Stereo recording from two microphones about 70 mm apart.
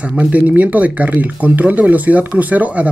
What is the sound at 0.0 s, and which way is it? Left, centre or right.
Speech, centre.